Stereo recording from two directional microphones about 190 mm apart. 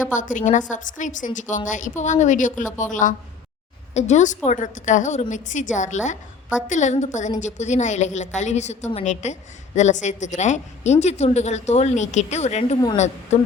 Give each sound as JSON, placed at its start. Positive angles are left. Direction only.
{"t": 0.1, "sound": "a woman's voice", "side_deg": 40}